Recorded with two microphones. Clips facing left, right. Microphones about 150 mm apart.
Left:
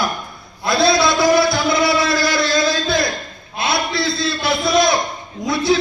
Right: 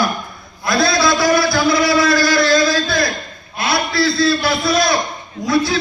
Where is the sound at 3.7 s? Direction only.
20° left (ahead or behind).